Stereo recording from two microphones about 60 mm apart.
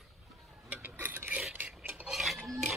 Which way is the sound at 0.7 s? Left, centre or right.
Right.